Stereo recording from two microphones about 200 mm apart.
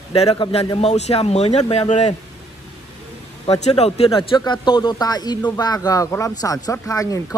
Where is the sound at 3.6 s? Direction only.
30° left (ahead or behind).